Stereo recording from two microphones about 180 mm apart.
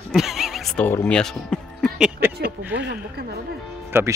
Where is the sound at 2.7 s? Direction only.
75° right (ahead or behind).